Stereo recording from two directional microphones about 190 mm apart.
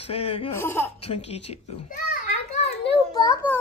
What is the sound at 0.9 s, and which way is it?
A child's voice, 35° left (ahead or behind).